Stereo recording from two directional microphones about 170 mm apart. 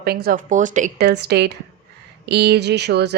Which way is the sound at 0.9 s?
75° right (ahead or behind).